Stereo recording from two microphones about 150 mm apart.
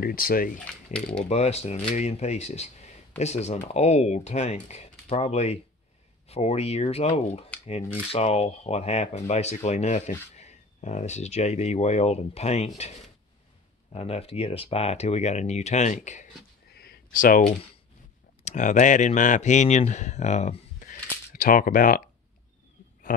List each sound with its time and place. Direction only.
0.0 s speech: 75° left (ahead or behind)
0.9 s speech: 5° left (ahead or behind)
1.3 s speech: 45° left (ahead or behind)
13.9 s speech: 40° left (ahead or behind)
16.7 s a sound: 90° left; by 17.4 s 65° left (ahead or behind)
18.4 s speech: 55° left (ahead or behind)